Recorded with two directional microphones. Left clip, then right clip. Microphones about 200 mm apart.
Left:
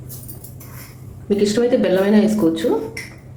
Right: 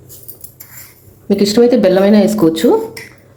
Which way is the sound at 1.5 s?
40° right (ahead or behind).